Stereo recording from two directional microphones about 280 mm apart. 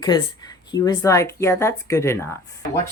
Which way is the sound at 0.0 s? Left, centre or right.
Centre.